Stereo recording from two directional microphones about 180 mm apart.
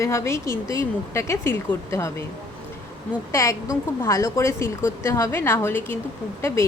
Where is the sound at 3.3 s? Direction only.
15° left (ahead or behind).